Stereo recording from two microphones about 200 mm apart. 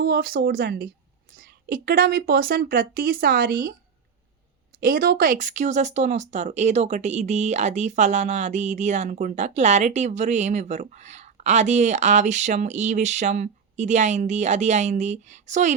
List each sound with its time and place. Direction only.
0.0 s a woman's voice: 50° right (ahead or behind)
4.8 s speech: 45° right (ahead or behind)